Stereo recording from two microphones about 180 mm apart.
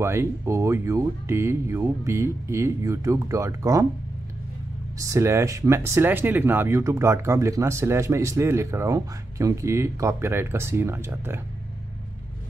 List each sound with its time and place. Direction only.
0.0 s speech: 15° right (ahead or behind)
4.9 s speech: 15° right (ahead or behind)